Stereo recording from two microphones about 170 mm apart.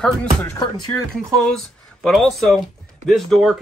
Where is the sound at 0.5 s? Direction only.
25° left (ahead or behind).